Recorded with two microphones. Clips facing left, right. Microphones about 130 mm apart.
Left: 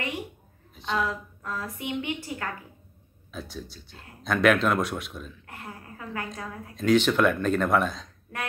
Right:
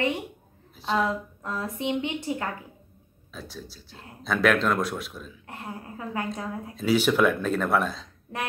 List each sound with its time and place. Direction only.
0.9 s a woman's voice: 25° right (ahead or behind)
3.3 s speech: centre (ahead or behind)
5.5 s a woman's voice: 25° right (ahead or behind)
6.7 s speech: 5° right (ahead or behind)
8.3 s a sound: 20° right (ahead or behind)